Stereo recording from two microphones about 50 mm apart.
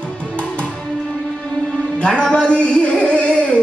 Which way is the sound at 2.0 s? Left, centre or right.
Centre.